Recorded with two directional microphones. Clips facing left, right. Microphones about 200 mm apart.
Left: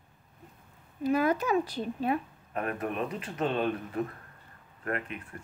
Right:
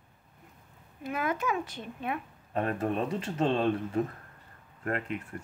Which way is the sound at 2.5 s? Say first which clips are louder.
Right 3 dB; 30° right (ahead or behind).